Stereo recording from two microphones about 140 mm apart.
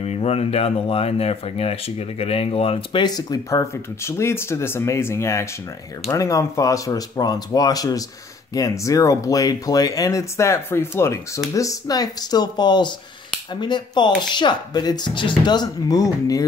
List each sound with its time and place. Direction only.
0.0 s speech: 45° left (ahead or behind); by 16.4 s 25° left (ahead or behind)